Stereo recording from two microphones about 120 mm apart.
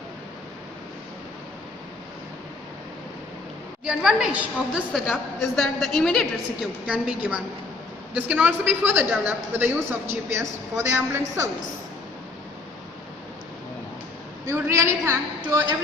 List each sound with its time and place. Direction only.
3.8 s a woman's voice: 10° right (ahead or behind)
5.4 s a woman's voice: 5° left (ahead or behind)
6.8 s a woman's voice: 10° right (ahead or behind)
14.4 s a woman's voice: 20° right (ahead or behind)